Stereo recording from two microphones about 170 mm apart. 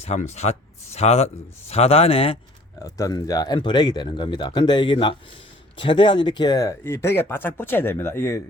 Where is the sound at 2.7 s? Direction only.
20° left (ahead or behind).